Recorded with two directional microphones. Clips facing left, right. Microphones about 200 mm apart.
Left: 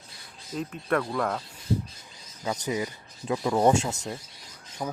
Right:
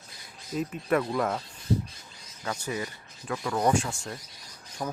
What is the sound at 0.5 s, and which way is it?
Speech, 5° right (ahead or behind).